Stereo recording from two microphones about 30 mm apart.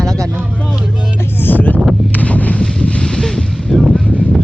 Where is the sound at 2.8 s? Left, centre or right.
Left.